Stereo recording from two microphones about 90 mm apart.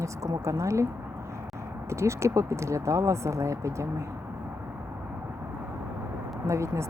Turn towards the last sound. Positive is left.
turn(degrees=-35)  # may be behind; listen again after turning